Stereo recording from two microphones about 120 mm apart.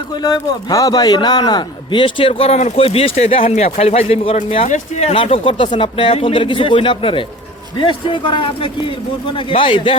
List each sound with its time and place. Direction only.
0.1 s a man's voice: 35° left (ahead or behind); by 4.7 s 55° left (ahead or behind)
4.7 s speech: 70° left (ahead or behind)
5.1 s a man's voice: 50° left (ahead or behind)